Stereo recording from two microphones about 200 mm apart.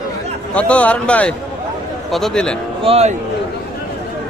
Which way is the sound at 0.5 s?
5° left (ahead or behind).